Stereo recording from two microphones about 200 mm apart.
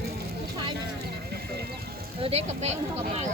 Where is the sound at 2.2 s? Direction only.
35° right (ahead or behind).